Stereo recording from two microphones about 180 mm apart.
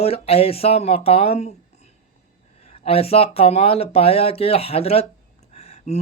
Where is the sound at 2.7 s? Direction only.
35° left (ahead or behind).